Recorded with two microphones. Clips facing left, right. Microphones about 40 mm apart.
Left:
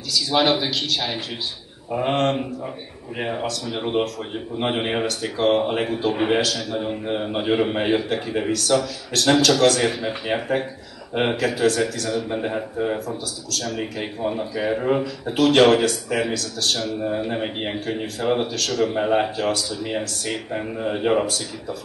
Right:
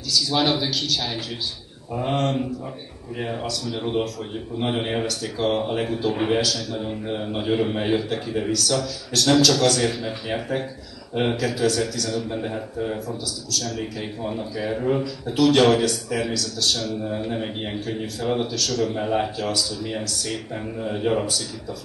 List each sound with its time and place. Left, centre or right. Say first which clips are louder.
0.1 s speech: left 2 dB; left
8.5 s speech: left 4 dB; left
12.1 s speech: left 3 dB; left